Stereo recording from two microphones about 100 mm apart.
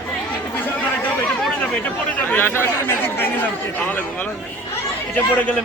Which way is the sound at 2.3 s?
20° left (ahead or behind).